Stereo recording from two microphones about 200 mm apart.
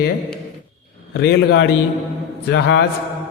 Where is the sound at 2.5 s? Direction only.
60° left (ahead or behind).